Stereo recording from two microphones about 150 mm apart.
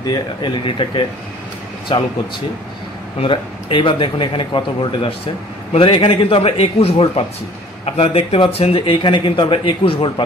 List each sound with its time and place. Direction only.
0.0 s speech: 30° left (ahead or behind)
3.2 s speech: 35° left (ahead or behind)